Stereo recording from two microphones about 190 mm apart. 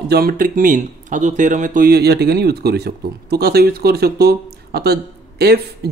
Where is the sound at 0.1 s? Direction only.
50° right (ahead or behind).